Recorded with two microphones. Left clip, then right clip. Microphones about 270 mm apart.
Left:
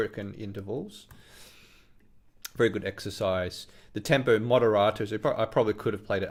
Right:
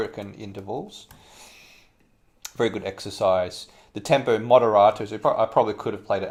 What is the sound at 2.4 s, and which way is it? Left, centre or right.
Speech, left.